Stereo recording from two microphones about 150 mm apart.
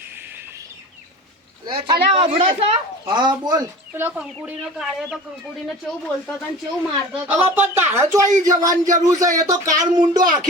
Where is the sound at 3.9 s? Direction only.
10° right (ahead or behind).